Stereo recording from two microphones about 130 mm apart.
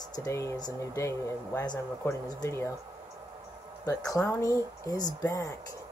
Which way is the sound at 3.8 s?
25° left (ahead or behind).